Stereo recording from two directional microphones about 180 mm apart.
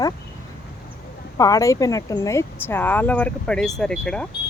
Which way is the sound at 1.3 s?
20° left (ahead or behind).